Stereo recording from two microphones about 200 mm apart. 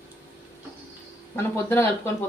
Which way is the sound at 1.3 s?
10° left (ahead or behind).